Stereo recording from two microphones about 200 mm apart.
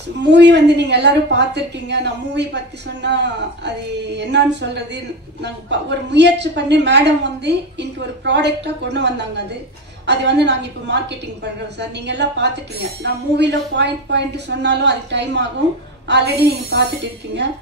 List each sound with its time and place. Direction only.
0.3 s a woman's voice: 60° right (ahead or behind)